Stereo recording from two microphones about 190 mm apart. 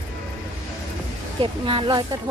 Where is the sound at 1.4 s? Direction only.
25° right (ahead or behind).